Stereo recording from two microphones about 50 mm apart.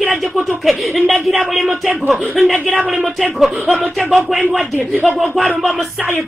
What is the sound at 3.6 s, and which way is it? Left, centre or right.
Speech, right.